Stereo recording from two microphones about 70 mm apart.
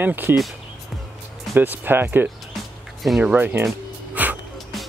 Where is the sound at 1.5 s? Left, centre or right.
Right.